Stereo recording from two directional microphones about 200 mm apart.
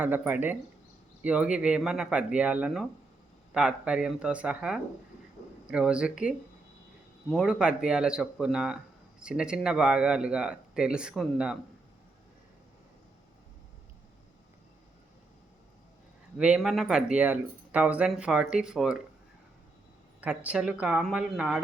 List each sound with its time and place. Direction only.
0.0 s speech: 10° right (ahead or behind)
16.4 s speech: 5° right (ahead or behind)
20.2 s speech: 5° right (ahead or behind)